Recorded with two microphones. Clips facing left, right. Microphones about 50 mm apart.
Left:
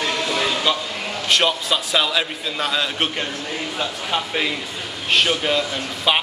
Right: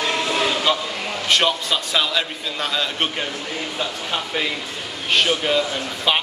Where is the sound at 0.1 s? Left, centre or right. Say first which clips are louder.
Right 1 dB; centre.